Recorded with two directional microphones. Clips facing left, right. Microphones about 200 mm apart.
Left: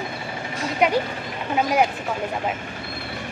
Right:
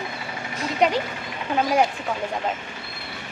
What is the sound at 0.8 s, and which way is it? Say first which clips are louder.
Speech: even; 5° left (ahead or behind).